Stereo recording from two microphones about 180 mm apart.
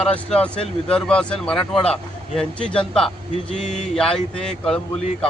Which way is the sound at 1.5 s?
30° left (ahead or behind).